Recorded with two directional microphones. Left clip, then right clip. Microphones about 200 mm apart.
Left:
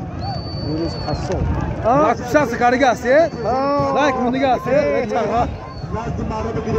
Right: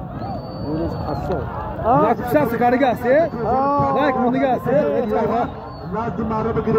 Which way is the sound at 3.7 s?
60° left (ahead or behind).